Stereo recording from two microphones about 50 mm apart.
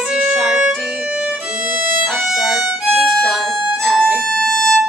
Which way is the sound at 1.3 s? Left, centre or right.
Centre.